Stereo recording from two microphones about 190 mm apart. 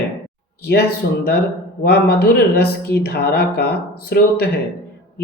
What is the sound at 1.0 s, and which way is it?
Speech, 55° left (ahead or behind).